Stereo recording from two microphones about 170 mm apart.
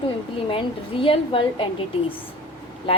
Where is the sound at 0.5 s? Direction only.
30° left (ahead or behind).